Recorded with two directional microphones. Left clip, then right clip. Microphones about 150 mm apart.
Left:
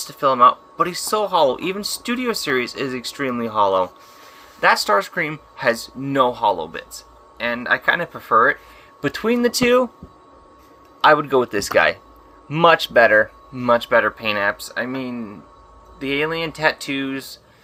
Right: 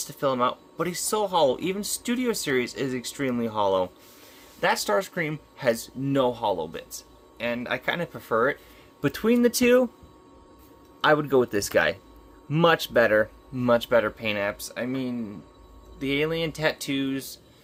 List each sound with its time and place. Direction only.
0.1 s speech: 35° right (ahead or behind)
9.0 s speech: 50° right (ahead or behind)
11.0 s speech: 40° right (ahead or behind)